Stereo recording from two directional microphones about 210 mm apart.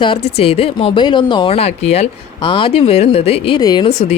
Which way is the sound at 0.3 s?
30° left (ahead or behind).